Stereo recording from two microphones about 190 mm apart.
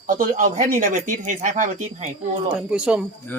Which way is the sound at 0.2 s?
45° right (ahead or behind).